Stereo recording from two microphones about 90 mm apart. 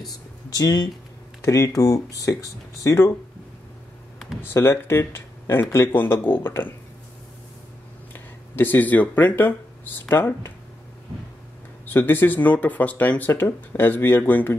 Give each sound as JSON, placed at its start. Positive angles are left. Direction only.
{"t": 0.5, "sound": "speech", "side_deg": 45}
{"t": 1.4, "sound": "speech", "side_deg": 35}
{"t": 4.4, "sound": "speech", "side_deg": 25}
{"t": 8.1, "sound": "speech", "side_deg": 20}
{"t": 11.8, "sound": "speech", "side_deg": 20}